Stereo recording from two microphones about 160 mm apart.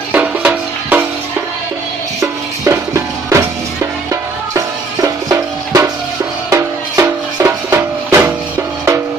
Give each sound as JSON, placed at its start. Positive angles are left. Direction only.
{"t": 0.1, "sound": "music", "side_deg": -10}
{"t": 2.6, "sound": "music", "side_deg": -20}